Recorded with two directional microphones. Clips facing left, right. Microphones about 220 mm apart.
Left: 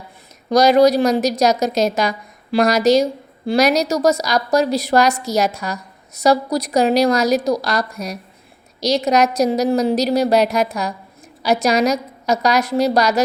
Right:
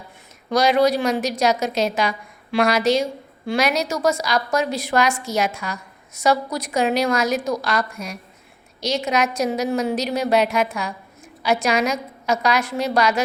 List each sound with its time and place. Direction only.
0.5 s a woman's voice: 40° left (ahead or behind)